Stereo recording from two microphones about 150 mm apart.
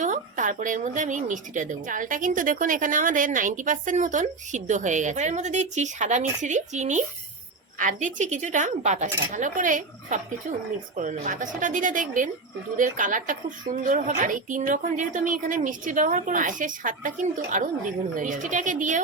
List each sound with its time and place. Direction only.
0.0 s a woman's voice: 55° right (ahead or behind)